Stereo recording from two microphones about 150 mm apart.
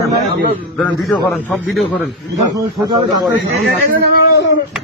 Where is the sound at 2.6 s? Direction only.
25° right (ahead or behind).